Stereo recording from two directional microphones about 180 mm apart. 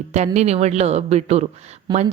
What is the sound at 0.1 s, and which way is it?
Speech, 40° right (ahead or behind).